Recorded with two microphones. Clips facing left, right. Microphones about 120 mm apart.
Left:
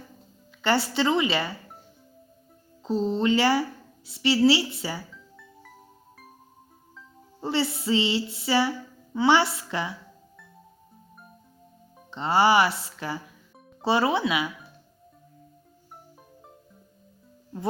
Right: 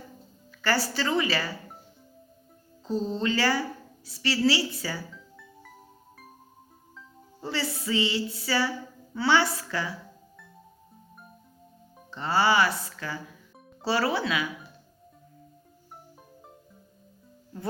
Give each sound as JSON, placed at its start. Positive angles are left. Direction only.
{"t": 0.6, "sound": "a woman's voice", "side_deg": 25}
{"t": 3.1, "sound": "a woman's voice", "side_deg": 25}
{"t": 5.1, "sound": "music", "side_deg": 0}
{"t": 7.4, "sound": "a woman's voice", "side_deg": 25}
{"t": 12.1, "sound": "a woman's voice", "side_deg": 25}